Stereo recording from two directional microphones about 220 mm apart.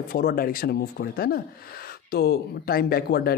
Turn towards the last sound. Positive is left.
turn(degrees=45)  # may be behind; listen again after turning